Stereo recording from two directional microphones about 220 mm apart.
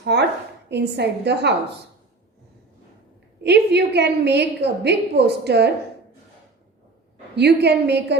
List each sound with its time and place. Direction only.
0.0 s a woman's voice: 50° right (ahead or behind)
3.4 s a woman's voice: 50° right (ahead or behind)
7.3 s a woman's voice: 50° right (ahead or behind)